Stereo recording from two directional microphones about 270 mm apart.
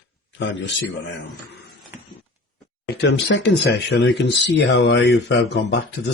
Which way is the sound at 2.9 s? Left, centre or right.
Left.